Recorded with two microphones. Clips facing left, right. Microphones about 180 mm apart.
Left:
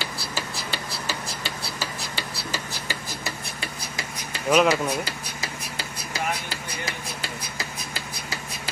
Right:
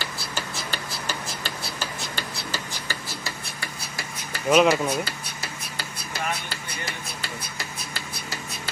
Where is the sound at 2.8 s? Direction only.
20° left (ahead or behind).